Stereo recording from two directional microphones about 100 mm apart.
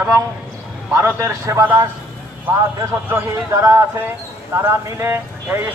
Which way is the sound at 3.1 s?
30° right (ahead or behind).